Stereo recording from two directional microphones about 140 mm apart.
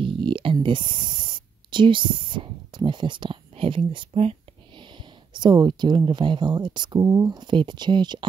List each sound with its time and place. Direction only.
0.0 s speech: 35° right (ahead or behind)